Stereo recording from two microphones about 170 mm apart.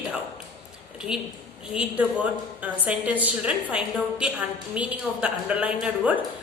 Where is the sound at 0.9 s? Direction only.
5° right (ahead or behind).